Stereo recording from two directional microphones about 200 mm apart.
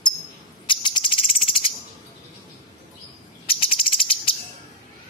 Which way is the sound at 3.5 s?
25° left (ahead or behind).